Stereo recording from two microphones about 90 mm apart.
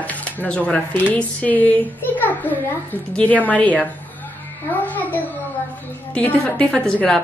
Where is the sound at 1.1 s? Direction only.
15° left (ahead or behind).